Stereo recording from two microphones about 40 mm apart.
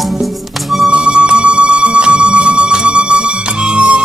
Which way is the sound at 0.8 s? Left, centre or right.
Right.